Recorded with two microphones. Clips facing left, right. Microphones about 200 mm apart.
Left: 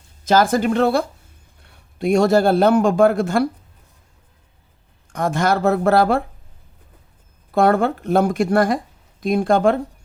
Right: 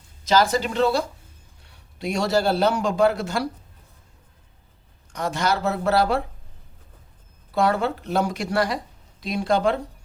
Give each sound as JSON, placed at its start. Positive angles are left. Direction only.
{"t": 0.3, "sound": "a man's voice", "side_deg": 50}
{"t": 5.1, "sound": "speech", "side_deg": 50}
{"t": 7.5, "sound": "speech", "side_deg": 50}